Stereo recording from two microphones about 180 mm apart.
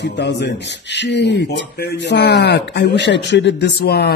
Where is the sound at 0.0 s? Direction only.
70° left (ahead or behind).